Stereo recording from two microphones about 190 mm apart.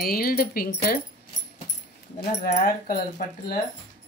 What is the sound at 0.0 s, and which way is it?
Speech, 50° left (ahead or behind).